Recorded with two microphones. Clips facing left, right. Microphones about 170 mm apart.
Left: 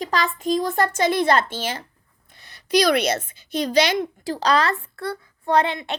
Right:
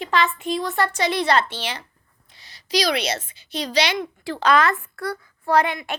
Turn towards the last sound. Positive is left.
turn(degrees=25)  # may be behind; listen again after turning